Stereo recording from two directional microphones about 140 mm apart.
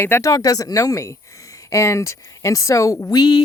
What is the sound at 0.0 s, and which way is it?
Speech, 20° left (ahead or behind).